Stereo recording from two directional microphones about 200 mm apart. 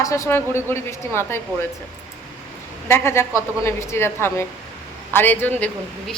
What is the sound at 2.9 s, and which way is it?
A woman's voice, 10° left (ahead or behind).